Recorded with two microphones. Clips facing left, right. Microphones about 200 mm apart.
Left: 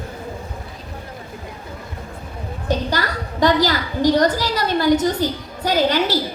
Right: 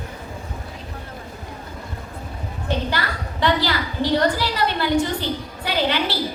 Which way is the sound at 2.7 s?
40° left (ahead or behind).